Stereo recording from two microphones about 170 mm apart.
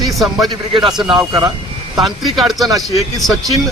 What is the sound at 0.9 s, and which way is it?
Speech, 5° right (ahead or behind).